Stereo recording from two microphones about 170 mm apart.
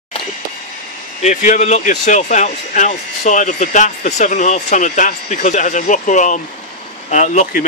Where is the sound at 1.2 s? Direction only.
45° left (ahead or behind).